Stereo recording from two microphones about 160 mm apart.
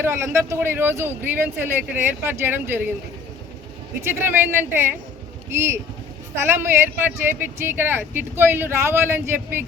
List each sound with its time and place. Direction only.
0.0 s speech: 15° right (ahead or behind)
4.0 s speech: 15° right (ahead or behind)